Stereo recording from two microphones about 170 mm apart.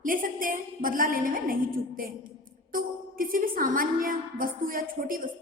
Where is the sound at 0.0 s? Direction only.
55° right (ahead or behind).